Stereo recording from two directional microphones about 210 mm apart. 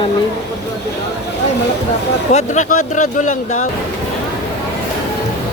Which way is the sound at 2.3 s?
35° left (ahead or behind).